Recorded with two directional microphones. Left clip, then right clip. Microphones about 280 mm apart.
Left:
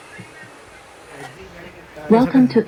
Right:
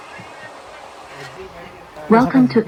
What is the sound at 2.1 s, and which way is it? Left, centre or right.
Speech, centre.